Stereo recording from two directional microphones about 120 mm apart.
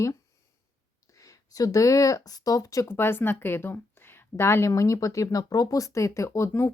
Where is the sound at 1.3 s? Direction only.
30° left (ahead or behind).